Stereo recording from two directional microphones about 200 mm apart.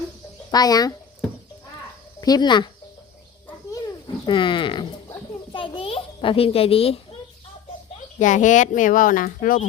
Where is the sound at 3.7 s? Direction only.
20° left (ahead or behind).